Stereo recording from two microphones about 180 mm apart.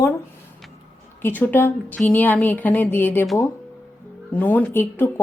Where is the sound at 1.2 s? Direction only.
10° left (ahead or behind).